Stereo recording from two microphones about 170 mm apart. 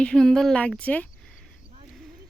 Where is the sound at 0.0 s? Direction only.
5° left (ahead or behind).